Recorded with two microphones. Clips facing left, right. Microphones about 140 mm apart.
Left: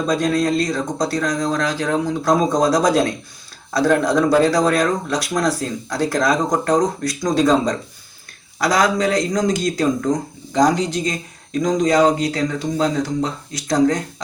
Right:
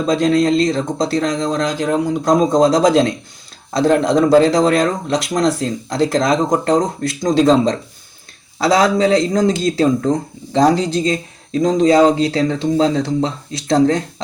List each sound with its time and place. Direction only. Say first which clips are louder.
0.1 s speech: right 5 dB; 25° right (ahead or behind)